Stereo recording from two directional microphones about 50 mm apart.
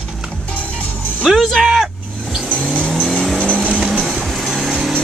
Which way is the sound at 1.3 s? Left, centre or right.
Centre.